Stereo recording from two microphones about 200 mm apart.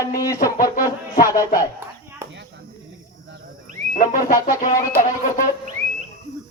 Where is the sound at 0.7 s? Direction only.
45° left (ahead or behind).